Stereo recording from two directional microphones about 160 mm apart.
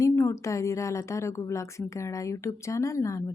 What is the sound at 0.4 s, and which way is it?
Speech, 20° left (ahead or behind).